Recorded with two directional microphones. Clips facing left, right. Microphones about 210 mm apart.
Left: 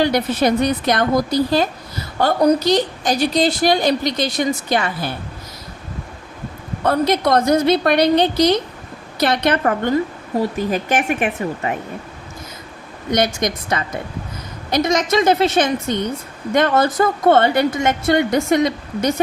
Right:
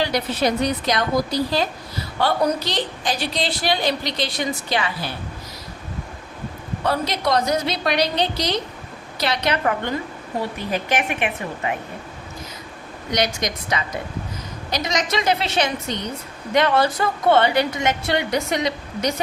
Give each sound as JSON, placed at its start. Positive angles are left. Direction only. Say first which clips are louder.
{"t": 0.0, "sound": "a woman's voice", "louder": "left 5 dB", "side_deg": 50}
{"t": 6.8, "sound": "a woman's voice", "louder": "left 6 dB", "side_deg": 50}
{"t": 13.1, "sound": "a woman's voice", "louder": "left 5 dB", "side_deg": 50}